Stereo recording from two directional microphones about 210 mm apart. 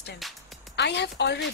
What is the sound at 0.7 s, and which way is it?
Speech, 55° left (ahead or behind).